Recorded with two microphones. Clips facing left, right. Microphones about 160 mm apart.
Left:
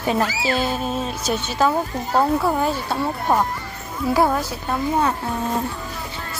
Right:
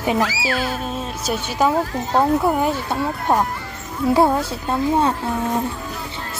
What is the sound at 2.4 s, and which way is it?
A woman's voice, 15° right (ahead or behind).